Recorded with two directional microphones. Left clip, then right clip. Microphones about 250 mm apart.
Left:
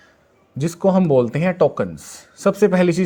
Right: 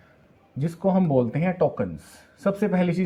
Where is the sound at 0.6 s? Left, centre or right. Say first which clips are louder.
Left 6 dB; left.